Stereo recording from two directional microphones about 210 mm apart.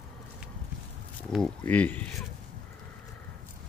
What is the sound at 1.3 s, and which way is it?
Speech, 5° left (ahead or behind).